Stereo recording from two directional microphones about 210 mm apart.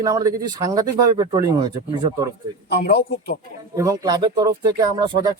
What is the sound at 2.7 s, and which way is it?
Speech, 50° left (ahead or behind).